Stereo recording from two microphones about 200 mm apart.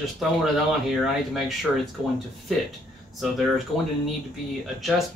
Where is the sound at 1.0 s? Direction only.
Centre (ahead or behind).